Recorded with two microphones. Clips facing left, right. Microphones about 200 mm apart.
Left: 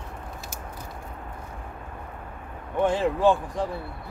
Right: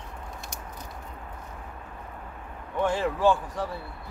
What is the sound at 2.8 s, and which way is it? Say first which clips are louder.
Speech: left 3 dB; 20° left (ahead or behind).